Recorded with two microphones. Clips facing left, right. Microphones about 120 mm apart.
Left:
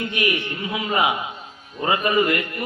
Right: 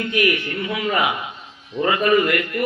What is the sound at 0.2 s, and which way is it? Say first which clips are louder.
A man's voice: right 5 dB; 25° left (ahead or behind).